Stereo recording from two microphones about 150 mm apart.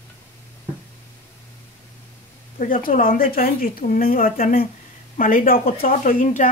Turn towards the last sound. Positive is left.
turn(degrees=70)  # may be behind; listen again after turning